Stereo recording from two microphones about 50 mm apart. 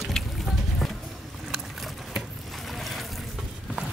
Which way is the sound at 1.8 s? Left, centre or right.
Centre.